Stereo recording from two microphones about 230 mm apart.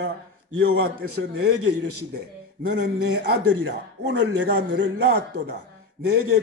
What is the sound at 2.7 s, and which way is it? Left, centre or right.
Speech, right.